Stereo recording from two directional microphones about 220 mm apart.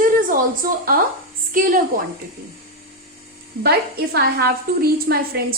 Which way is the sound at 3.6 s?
45° right (ahead or behind).